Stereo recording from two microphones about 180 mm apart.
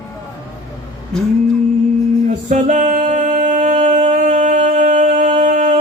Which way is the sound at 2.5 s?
45° right (ahead or behind).